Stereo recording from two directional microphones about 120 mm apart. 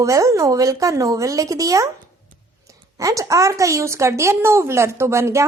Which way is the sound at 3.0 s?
30° right (ahead or behind).